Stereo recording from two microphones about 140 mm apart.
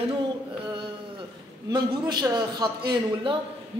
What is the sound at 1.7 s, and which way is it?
A man's voice, 30° right (ahead or behind).